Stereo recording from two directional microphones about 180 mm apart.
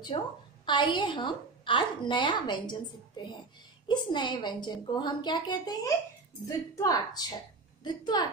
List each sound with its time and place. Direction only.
0.1 s a woman's voice: 30° left (ahead or behind)
3.8 s a woman's voice: 25° left (ahead or behind)